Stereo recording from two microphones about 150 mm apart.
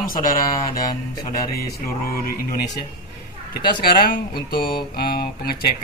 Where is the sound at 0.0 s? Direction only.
70° left (ahead or behind).